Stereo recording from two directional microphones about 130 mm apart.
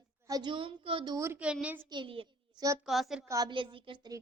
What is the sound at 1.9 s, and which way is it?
Speech, 40° right (ahead or behind).